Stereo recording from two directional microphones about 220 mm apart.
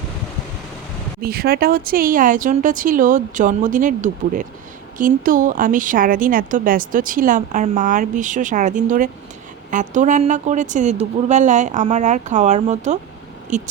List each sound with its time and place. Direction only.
1.2 s speech: 45° right (ahead or behind)